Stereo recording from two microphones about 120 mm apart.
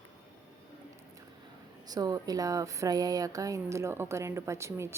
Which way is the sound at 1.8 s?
30° right (ahead or behind).